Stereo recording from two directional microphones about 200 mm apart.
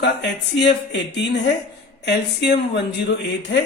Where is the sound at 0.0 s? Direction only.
60° left (ahead or behind).